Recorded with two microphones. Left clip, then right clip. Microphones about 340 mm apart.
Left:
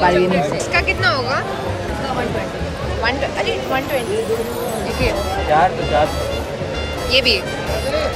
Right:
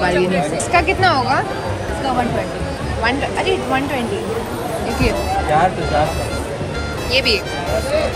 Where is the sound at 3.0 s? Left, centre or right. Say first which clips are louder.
Right 2 dB; centre.